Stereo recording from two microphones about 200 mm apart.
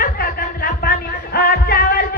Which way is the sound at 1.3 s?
50° left (ahead or behind).